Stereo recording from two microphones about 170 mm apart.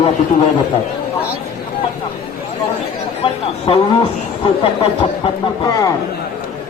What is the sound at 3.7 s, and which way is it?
Speech, 30° left (ahead or behind).